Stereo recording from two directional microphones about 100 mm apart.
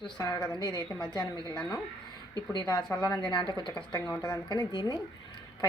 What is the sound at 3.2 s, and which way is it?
A woman's voice, 55° left (ahead or behind).